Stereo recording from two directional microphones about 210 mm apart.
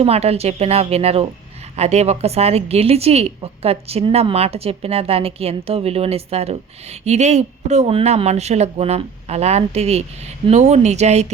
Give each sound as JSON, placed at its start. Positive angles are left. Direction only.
{"t": 0.0, "sound": "a woman's voice", "side_deg": -30}